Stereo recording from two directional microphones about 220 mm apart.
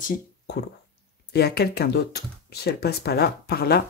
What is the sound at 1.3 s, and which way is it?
Speech, 45° left (ahead or behind).